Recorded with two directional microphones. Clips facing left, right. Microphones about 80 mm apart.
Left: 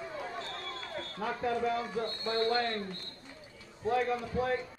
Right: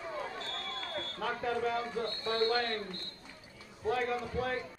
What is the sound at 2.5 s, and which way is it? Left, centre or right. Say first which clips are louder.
A man's voice: left 1 dB; left.